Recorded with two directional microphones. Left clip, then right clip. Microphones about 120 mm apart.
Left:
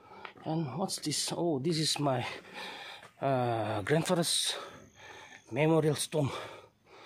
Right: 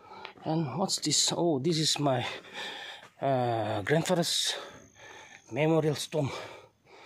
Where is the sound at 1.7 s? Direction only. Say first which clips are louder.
Right 3 dB; 25° right (ahead or behind).